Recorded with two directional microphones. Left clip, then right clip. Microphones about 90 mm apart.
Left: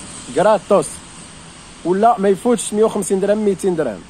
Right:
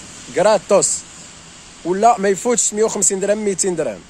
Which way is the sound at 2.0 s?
40° right (ahead or behind).